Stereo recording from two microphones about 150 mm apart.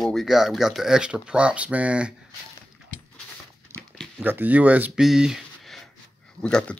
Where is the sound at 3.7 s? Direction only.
15° right (ahead or behind).